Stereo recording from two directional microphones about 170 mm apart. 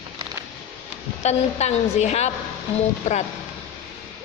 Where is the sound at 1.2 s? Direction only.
40° left (ahead or behind).